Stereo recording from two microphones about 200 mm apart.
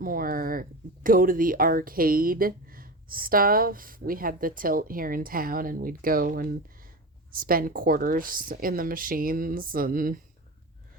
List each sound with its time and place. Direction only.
0.0 s speech: 45° right (ahead or behind)